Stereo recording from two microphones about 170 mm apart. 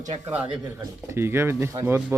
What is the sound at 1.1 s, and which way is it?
Speech, 15° right (ahead or behind).